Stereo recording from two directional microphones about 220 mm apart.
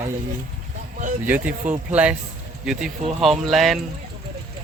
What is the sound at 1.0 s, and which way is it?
Speech, 35° right (ahead or behind).